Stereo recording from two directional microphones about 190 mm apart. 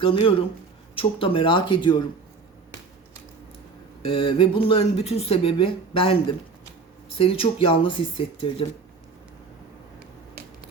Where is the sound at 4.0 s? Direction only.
25° left (ahead or behind).